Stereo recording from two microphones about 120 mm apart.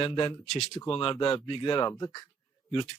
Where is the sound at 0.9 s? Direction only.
45° left (ahead or behind).